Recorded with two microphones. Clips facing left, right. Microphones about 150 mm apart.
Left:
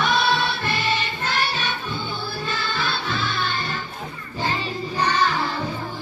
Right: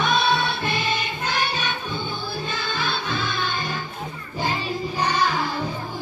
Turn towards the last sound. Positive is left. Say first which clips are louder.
# left 1 dB
turn(degrees=-10)  # may be behind; listen again after turning